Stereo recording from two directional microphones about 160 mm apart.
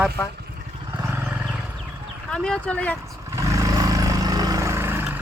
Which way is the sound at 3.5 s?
20° right (ahead or behind).